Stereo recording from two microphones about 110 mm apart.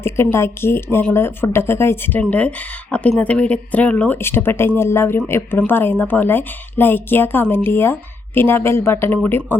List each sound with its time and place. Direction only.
0.0 s a woman's voice: 25° left (ahead or behind)